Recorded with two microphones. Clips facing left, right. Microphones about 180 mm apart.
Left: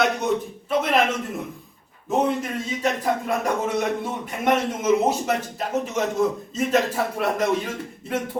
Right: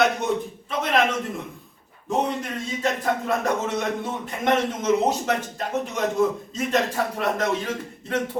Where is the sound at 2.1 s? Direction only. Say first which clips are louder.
Left 3 dB; 5° left (ahead or behind).